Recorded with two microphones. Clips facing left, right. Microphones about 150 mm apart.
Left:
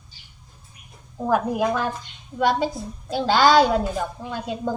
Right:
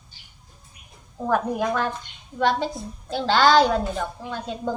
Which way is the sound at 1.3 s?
10° left (ahead or behind).